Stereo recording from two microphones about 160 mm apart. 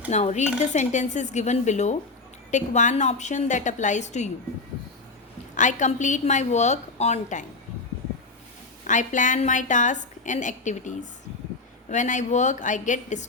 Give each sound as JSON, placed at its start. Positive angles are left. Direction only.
{"t": 0.1, "sound": "a woman's voice", "side_deg": 45}
{"t": 5.5, "sound": "a woman's voice", "side_deg": 50}
{"t": 8.9, "sound": "a woman's voice", "side_deg": 50}